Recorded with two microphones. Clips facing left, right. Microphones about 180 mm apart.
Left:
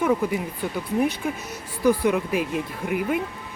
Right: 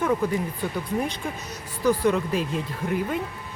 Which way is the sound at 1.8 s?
10° left (ahead or behind).